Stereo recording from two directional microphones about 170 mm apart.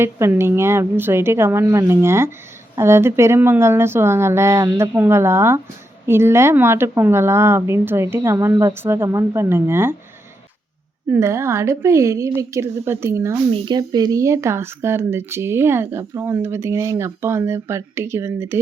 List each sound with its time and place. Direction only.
0.0 s speech: 15° right (ahead or behind)
11.1 s speech: 15° right (ahead or behind)